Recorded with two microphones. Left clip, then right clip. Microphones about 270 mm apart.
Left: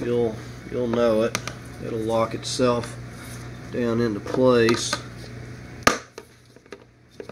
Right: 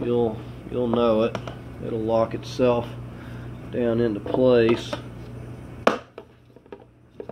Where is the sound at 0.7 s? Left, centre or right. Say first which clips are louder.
Even; centre; by 4.9 s left.